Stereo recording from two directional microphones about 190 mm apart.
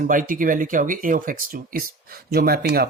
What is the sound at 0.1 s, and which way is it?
Speech, 45° right (ahead or behind).